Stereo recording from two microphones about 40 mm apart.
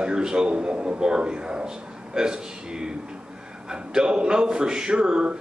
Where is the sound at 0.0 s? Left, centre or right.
Centre.